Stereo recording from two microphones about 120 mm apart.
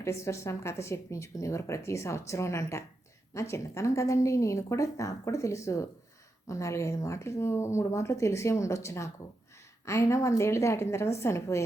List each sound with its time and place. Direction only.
0.0 s a woman's voice: 25° left (ahead or behind)